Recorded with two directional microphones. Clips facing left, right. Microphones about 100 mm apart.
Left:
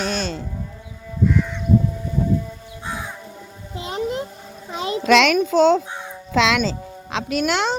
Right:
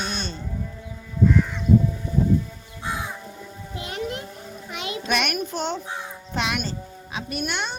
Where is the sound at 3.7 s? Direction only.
25° left (ahead or behind).